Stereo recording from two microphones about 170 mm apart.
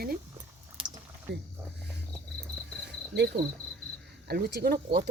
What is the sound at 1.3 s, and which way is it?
Speech, 90° right.